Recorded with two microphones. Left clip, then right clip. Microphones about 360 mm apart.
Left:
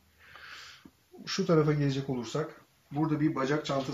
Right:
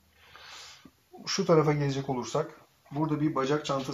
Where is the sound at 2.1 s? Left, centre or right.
Right.